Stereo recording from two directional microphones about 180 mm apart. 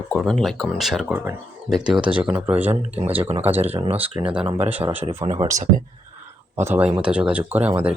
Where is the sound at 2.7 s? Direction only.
35° right (ahead or behind).